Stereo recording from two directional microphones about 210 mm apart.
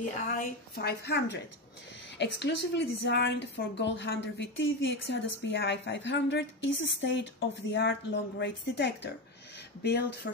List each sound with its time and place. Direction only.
0.3 s a woman's voice: 50° left (ahead or behind)